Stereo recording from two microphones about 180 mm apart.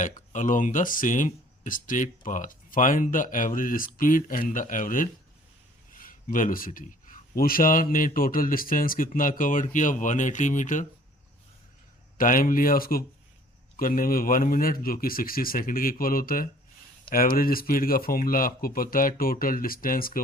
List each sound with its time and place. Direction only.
0.3 s speech: 45° left (ahead or behind)
12.1 s speech: 50° left (ahead or behind)